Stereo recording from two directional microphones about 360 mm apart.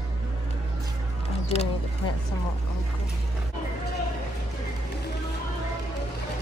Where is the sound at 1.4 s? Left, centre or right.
Centre.